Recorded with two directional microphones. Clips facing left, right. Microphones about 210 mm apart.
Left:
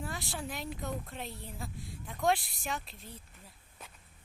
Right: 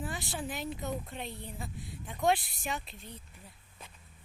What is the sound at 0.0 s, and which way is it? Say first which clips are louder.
A woman's voice: right 2 dB; centre (ahead or behind).